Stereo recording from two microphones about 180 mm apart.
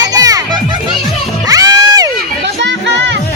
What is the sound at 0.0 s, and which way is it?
Children playing, 20° right (ahead or behind).